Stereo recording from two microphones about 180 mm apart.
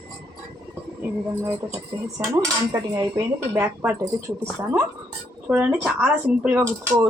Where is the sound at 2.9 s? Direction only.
15° right (ahead or behind).